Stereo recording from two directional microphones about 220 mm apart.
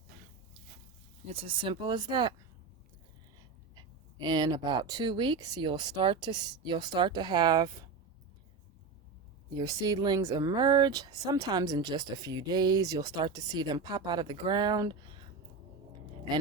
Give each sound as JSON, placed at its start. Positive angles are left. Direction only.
{"t": 1.3, "sound": "speech", "side_deg": -25}
{"t": 3.8, "sound": "speech", "side_deg": -20}
{"t": 9.6, "sound": "speech", "side_deg": -15}